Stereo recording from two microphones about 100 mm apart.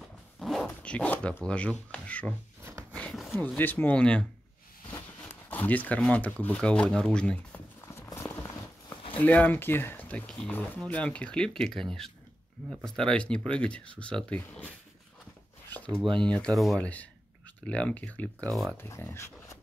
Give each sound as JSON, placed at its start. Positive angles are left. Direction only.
{"t": 0.4, "sound": "zipper", "side_deg": 0}
{"t": 0.8, "sound": "speech", "side_deg": 15}
{"t": 3.1, "sound": "a sound", "side_deg": 0}
{"t": 3.3, "sound": "speech", "side_deg": 15}
{"t": 7.9, "sound": "a sound", "side_deg": 30}
{"t": 9.1, "sound": "speech", "side_deg": 15}
{"t": 15.7, "sound": "a sound", "side_deg": 15}
{"t": 16.2, "sound": "speech", "side_deg": 10}
{"t": 16.8, "sound": "speech", "side_deg": 15}
{"t": 18.5, "sound": "speech", "side_deg": 0}
{"t": 18.8, "sound": "speech", "side_deg": 30}